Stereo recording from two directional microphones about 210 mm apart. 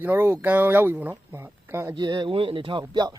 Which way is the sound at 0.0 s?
10° right (ahead or behind).